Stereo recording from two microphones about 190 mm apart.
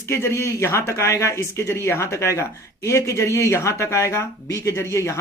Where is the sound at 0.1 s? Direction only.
15° left (ahead or behind).